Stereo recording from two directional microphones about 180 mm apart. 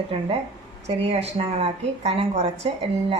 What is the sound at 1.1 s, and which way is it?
Speech, 35° right (ahead or behind).